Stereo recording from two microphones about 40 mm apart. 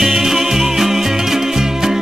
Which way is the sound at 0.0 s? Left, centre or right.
Centre.